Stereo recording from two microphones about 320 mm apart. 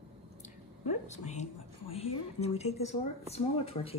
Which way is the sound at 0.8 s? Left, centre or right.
Left.